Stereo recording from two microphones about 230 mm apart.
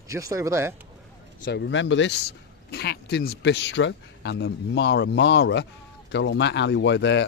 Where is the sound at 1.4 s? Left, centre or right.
Left.